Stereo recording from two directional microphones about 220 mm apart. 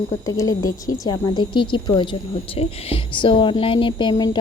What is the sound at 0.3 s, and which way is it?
A woman's voice, 15° left (ahead or behind).